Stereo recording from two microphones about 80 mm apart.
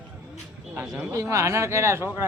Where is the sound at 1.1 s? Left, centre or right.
Right.